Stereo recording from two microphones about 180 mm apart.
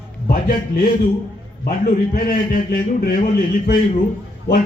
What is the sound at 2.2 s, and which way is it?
Speech, 55° left (ahead or behind).